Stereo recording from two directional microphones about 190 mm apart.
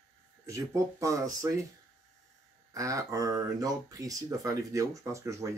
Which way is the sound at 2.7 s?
15° right (ahead or behind).